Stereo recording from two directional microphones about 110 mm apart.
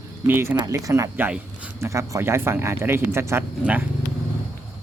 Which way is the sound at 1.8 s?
30° right (ahead or behind).